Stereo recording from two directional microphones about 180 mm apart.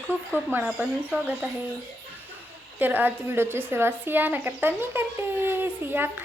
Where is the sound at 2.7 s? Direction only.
10° right (ahead or behind).